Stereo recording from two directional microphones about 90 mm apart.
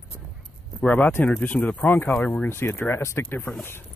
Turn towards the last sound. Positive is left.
turn(degrees=25)  # may be behind; listen again after turning